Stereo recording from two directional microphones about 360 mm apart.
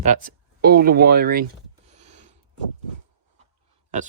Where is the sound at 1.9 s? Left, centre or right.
Centre.